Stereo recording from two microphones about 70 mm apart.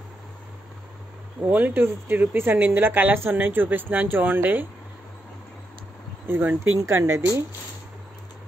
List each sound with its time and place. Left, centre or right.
1.4 s a woman's voice: right
6.2 s speech: right
6.8 s speech: right